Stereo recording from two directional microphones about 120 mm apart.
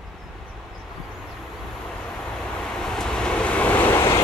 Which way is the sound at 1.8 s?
5° left (ahead or behind).